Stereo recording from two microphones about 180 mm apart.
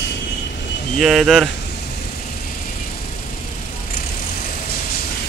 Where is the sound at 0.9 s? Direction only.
Centre (ahead or behind).